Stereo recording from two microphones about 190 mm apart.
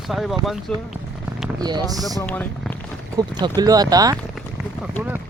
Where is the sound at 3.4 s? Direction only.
20° right (ahead or behind).